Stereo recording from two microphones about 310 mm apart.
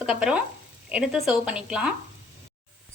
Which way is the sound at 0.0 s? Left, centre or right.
Centre.